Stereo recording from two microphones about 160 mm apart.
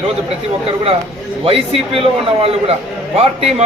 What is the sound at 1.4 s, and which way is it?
A man's voice, 35° right (ahead or behind).